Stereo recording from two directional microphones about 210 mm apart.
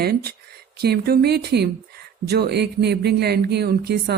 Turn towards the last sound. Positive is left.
turn(degrees=-50)  # may be behind; listen again after turning